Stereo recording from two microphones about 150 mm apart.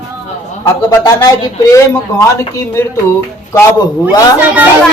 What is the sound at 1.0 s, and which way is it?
Speech, 25° left (ahead or behind).